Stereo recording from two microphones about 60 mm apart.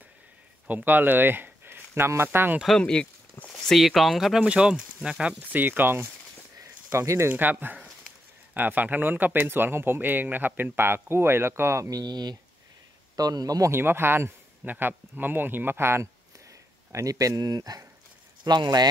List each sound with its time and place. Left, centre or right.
0.7 s speech: right
2.8 s speech: centre
3.3 s a sound: centre
3.7 s speech: centre
4.4 s speech: centre
5.5 s speech: right
6.6 s a sound: right
7.2 s speech: right
13.1 s a man's voice: right
13.7 s speech: right
16.9 s speech: right